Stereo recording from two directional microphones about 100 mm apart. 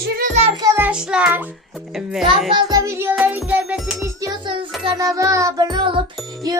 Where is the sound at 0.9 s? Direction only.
10° right (ahead or behind).